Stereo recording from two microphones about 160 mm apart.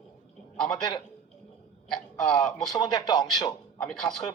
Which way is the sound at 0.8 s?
25° left (ahead or behind).